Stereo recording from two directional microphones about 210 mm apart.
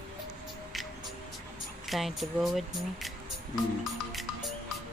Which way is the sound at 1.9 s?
Centre (ahead or behind).